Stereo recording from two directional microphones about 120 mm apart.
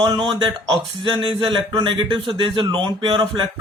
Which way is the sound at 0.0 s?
45° right (ahead or behind).